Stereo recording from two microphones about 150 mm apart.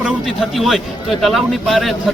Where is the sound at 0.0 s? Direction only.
Centre (ahead or behind).